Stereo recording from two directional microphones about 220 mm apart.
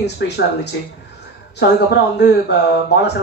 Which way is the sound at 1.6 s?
50° left (ahead or behind).